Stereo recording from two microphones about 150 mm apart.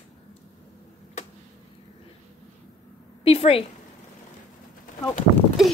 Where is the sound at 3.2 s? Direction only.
40° left (ahead or behind).